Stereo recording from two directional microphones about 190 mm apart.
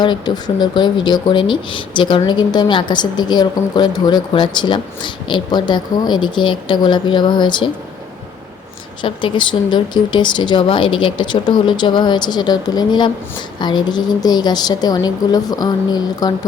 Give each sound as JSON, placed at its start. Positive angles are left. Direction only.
{"t": 0.0, "sound": "speech", "side_deg": 25}
{"t": 9.0, "sound": "speech", "side_deg": 25}